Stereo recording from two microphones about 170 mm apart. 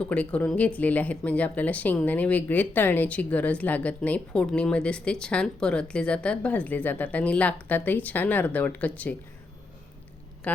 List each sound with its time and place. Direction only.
0.0 s speech: 5° left (ahead or behind)
10.5 s speech: 10° left (ahead or behind)